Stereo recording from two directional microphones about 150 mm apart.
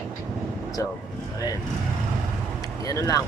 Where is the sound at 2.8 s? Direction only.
25° left (ahead or behind).